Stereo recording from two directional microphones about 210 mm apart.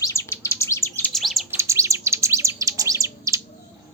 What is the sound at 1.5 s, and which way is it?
Bird, 15° right (ahead or behind).